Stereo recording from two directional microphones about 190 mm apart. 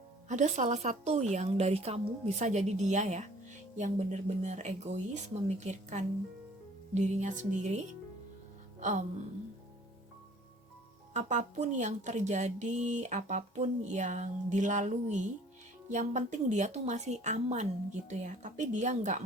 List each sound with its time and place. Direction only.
0.3 s speech: 40° right (ahead or behind)
8.8 s music: 40° right (ahead or behind)
11.1 s speech: 40° right (ahead or behind)